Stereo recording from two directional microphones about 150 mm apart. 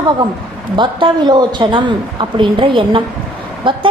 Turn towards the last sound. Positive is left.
turn(degrees=-35)  # may be behind; listen again after turning